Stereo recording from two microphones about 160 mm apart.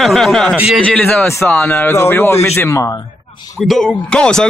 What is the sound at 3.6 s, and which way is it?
Speech, centre (ahead or behind).